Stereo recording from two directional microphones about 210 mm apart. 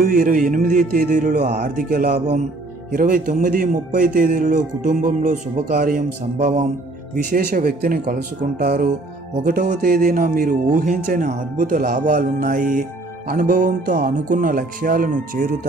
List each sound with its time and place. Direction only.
0.0 s speech: 40° right (ahead or behind)
7.2 s speech: 45° right (ahead or behind)